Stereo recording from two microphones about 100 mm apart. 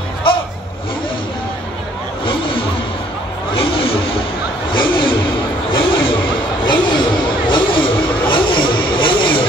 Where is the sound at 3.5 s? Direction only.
65° left (ahead or behind).